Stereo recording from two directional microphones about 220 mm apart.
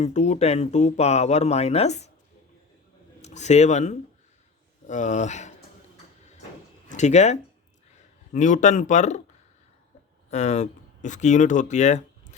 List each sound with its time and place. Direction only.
0.0 s speech: 30° left (ahead or behind)
3.2 s speech: 30° left (ahead or behind)
6.8 s speech: 30° left (ahead or behind)
10.2 s speech: 30° left (ahead or behind)